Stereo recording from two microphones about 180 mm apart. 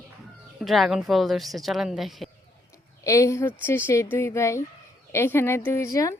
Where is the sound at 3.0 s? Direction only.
15° left (ahead or behind).